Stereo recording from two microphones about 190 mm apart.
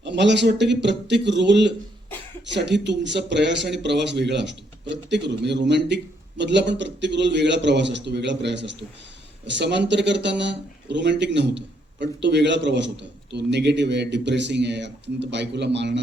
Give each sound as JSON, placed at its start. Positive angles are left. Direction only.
{"t": 0.0, "sound": "speech", "side_deg": -65}